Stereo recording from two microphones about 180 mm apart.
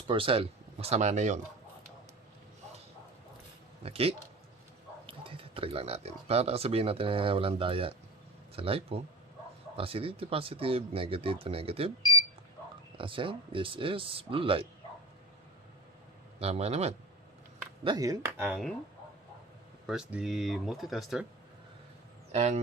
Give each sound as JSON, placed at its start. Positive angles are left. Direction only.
{"t": 0.1, "sound": "speech", "side_deg": -30}
{"t": 3.8, "sound": "speech", "side_deg": -35}
{"t": 13.0, "sound": "speech", "side_deg": -30}
{"t": 16.4, "sound": "speech", "side_deg": -35}
{"t": 17.8, "sound": "speech", "side_deg": -20}
{"t": 19.9, "sound": "speech", "side_deg": -5}
{"t": 22.3, "sound": "speech", "side_deg": -40}